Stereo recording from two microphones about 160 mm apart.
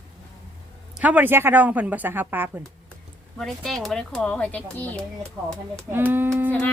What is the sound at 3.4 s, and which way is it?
Speech, centre (ahead or behind).